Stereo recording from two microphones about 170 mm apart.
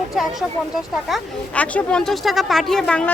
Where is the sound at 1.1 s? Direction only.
10° left (ahead or behind).